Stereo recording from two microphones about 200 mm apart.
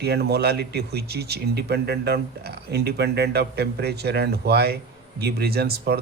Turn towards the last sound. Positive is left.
turn(degrees=-50)  # may be behind; listen again after turning